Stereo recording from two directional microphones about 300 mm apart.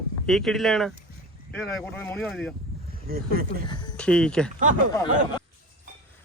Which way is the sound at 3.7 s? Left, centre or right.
Centre.